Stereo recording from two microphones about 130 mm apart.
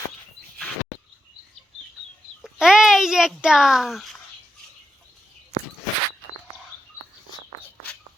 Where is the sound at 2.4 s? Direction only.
5° right (ahead or behind).